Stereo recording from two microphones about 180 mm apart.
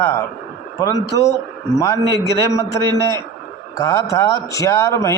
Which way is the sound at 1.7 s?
15° left (ahead or behind).